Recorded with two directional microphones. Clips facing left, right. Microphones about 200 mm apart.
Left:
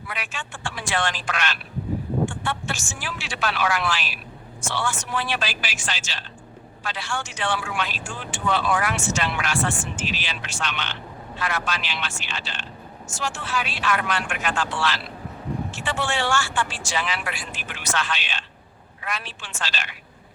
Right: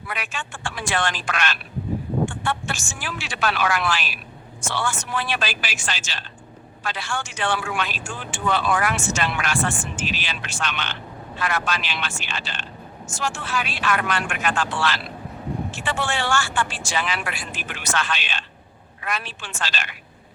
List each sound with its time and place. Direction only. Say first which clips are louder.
0.1 s speech: right 3 dB; 50° right (ahead or behind)